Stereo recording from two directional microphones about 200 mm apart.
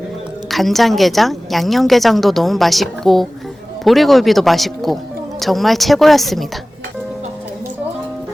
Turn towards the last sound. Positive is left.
turn(degrees=0)  # may be behind; listen again after turning